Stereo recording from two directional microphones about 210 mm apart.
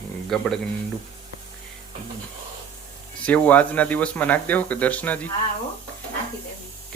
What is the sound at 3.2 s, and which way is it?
Speech, 5° left (ahead or behind).